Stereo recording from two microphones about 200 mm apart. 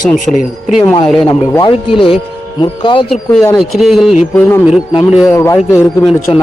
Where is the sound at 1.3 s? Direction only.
15° left (ahead or behind).